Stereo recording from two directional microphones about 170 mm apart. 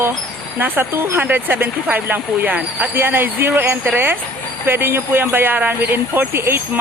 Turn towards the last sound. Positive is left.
turn(degrees=-15)  # may be behind; listen again after turning